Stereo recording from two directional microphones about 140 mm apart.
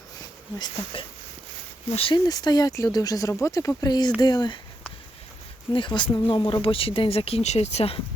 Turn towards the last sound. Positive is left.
turn(degrees=45)  # may be behind; listen again after turning